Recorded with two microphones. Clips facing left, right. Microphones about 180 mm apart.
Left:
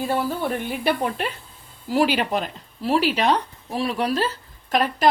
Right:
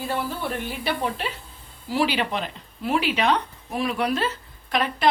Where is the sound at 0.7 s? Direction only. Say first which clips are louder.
Left 4 dB; 55° left (ahead or behind).